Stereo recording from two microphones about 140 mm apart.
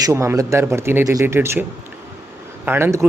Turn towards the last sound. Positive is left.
turn(degrees=-15)  # may be behind; listen again after turning